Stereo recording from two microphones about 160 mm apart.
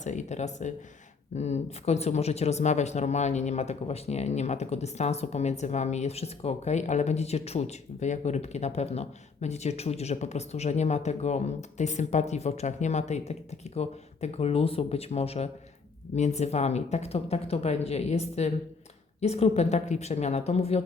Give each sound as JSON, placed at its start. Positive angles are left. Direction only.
{"t": 0.0, "sound": "speech", "side_deg": 50}